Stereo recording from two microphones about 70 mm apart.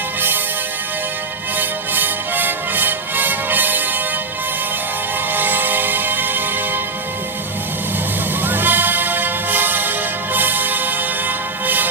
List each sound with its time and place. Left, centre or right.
1.5 s music: right
5.3 s music: right
8.4 s music: right